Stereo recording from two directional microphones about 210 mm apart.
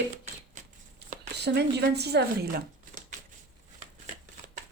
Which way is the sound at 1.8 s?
50° right (ahead or behind).